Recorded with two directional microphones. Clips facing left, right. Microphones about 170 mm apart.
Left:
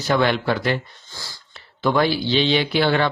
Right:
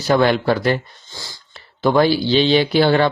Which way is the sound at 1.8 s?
35° right (ahead or behind).